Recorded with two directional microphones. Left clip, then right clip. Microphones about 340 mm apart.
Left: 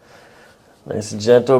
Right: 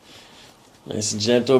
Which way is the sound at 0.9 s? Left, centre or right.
Left.